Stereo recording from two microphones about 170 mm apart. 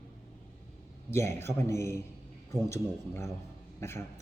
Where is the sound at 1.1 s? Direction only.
15° left (ahead or behind).